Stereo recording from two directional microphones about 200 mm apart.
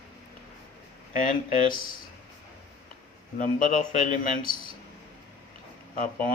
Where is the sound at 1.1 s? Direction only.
45° left (ahead or behind).